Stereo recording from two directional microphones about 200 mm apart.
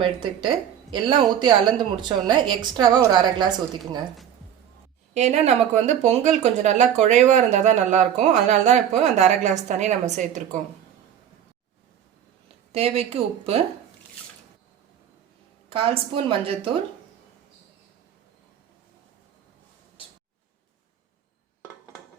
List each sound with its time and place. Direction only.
0.0 s a woman's voice: 25° right (ahead or behind)
5.1 s speech: 35° right (ahead or behind)
12.7 s a woman's voice: 30° right (ahead or behind)
15.7 s a woman's voice: 30° right (ahead or behind)